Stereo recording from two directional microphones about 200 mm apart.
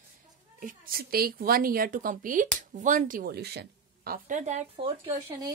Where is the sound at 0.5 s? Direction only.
45° right (ahead or behind).